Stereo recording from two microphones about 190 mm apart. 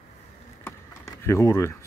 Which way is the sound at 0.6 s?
15° left (ahead or behind).